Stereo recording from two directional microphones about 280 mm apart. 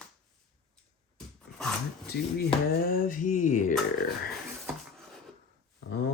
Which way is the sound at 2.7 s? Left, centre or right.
Left.